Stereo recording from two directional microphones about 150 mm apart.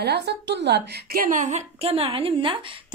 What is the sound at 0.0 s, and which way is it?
A woman's voice, 90° right.